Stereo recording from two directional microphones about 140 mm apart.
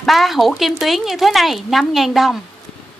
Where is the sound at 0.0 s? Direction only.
Centre (ahead or behind).